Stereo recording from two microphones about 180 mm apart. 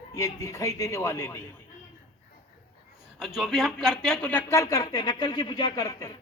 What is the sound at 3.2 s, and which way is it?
Speech, centre (ahead or behind).